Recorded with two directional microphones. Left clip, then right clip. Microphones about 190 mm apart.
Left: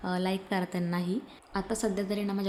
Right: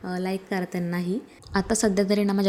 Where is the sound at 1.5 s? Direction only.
35° right (ahead or behind).